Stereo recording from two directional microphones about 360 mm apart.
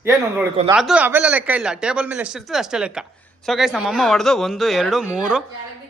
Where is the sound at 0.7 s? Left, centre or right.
Centre.